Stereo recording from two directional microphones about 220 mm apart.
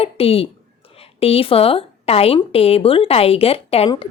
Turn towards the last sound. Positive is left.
turn(degrees=25)  # may be behind; listen again after turning